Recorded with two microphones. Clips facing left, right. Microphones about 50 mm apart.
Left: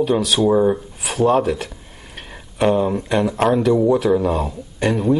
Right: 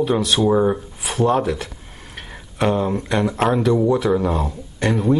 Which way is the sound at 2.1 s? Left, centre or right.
Centre.